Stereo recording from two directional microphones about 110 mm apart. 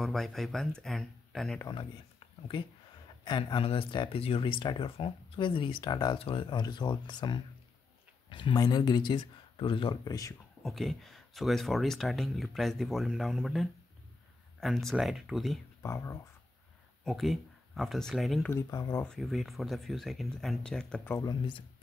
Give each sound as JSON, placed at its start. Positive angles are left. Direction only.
{"t": 0.0, "sound": "speech", "side_deg": 5}
{"t": 3.3, "sound": "speech", "side_deg": 45}
{"t": 3.6, "sound": "speech", "side_deg": 55}
{"t": 10.0, "sound": "speech", "side_deg": 30}
{"t": 10.6, "sound": "speech", "side_deg": 0}
{"t": 15.8, "sound": "speech", "side_deg": 30}
{"t": 17.0, "sound": "speech", "side_deg": 0}
{"t": 18.7, "sound": "speech", "side_deg": 35}
{"t": 19.0, "sound": "speech", "side_deg": 0}
{"t": 21.3, "sound": "speech", "side_deg": 45}